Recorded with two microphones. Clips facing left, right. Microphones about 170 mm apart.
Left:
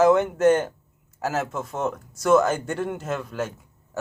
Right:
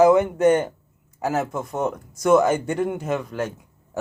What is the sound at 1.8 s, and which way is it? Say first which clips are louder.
Speech: right 2 dB; 15° right (ahead or behind).